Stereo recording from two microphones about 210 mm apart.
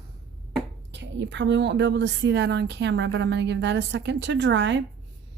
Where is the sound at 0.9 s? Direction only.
55° right (ahead or behind).